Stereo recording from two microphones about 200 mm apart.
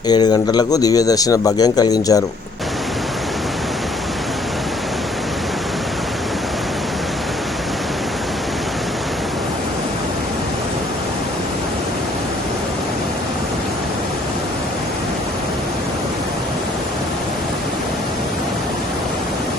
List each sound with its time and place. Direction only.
0.1 s a man's voice: 20° left (ahead or behind)